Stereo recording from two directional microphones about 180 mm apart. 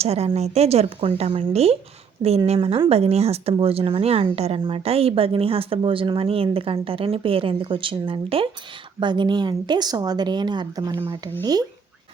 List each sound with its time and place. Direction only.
0.0 s speech: 35° right (ahead or behind)